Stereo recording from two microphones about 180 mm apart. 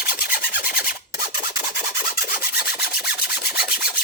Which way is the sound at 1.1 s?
55° left (ahead or behind).